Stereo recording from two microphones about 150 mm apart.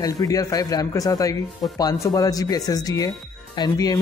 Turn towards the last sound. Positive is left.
turn(degrees=25)  # may be behind; listen again after turning